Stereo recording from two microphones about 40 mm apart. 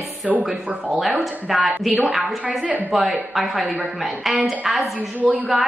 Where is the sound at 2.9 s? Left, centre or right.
Centre.